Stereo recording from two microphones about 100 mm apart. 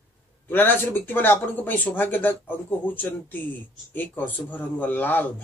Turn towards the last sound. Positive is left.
turn(degrees=20)  # may be behind; listen again after turning